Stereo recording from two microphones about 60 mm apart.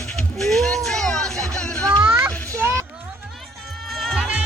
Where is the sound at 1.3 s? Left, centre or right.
Right.